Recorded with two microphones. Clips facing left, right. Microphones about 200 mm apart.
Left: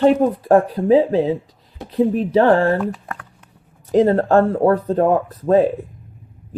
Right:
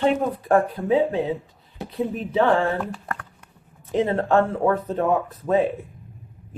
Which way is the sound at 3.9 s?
40° left (ahead or behind).